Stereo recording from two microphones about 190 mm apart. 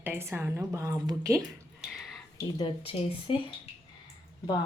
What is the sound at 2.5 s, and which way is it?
Speech, 25° left (ahead or behind).